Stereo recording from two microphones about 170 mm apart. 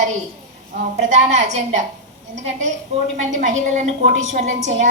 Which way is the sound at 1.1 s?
45° right (ahead or behind).